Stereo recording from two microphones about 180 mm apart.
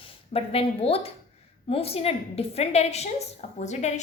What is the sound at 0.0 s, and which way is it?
A woman's voice, 35° left (ahead or behind).